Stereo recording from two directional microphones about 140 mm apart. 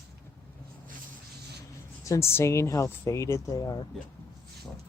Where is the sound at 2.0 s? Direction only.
20° left (ahead or behind).